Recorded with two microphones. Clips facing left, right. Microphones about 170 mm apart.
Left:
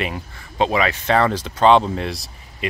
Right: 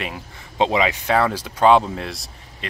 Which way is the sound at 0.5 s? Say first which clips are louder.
Even; 20° right (ahead or behind).